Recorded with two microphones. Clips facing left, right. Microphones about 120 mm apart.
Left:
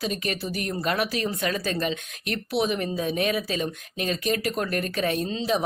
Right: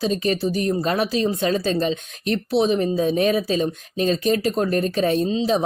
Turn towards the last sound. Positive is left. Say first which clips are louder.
# right 6 dB
turn(degrees=-25)  # may be behind; listen again after turning